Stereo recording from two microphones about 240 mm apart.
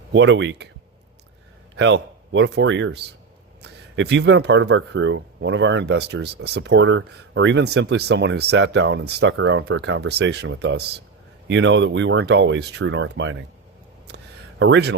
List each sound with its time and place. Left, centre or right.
0.1 s speech: right
1.7 s speech: right
14.6 s speech: right